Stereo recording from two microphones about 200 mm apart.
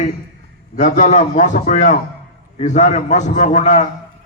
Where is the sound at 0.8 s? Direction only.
40° left (ahead or behind).